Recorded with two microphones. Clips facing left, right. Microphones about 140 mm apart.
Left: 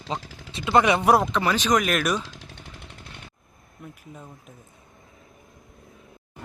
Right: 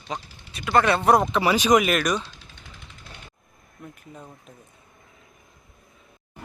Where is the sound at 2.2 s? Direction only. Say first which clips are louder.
Left 4 dB; 85° left.